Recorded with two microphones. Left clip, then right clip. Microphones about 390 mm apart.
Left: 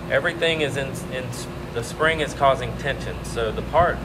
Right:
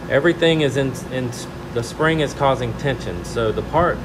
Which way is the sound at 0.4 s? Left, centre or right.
Right.